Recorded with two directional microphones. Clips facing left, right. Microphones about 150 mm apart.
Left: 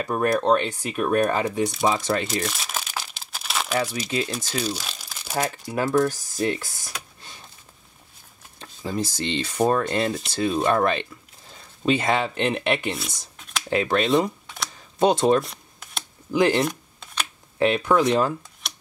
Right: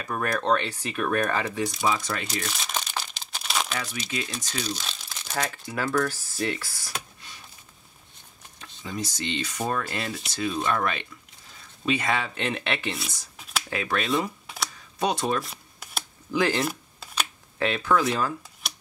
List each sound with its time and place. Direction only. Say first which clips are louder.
0.0 s speech: left 6 dB; 25° left (ahead or behind)
2.2 s crumpling: left 5 dB; centre (ahead or behind)
3.7 s speech: left 8 dB; 35° left (ahead or behind)
4.5 s crumpling: left 4 dB; 5° left (ahead or behind)
5.4 s speech: left 4 dB; 25° left (ahead or behind)
8.5 s speech: left 6 dB; 30° left (ahead or behind)
12.9 s a sound: left 3 dB; centre (ahead or behind)
13.7 s speech: left 7 dB; 25° left (ahead or behind)
15.4 s a sound: left 2 dB; 5° right (ahead or behind)
16.3 s speech: left 5 dB; 20° left (ahead or behind)
16.6 s camera: left 3 dB; 5° right (ahead or behind)
17.6 s speech: left 4 dB; 20° left (ahead or behind)